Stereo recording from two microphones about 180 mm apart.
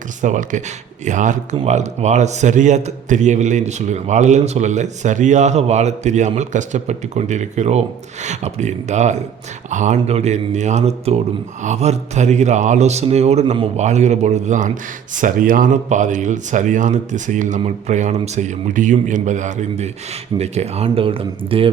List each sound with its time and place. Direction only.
0.2 s a man's voice: 45° right (ahead or behind)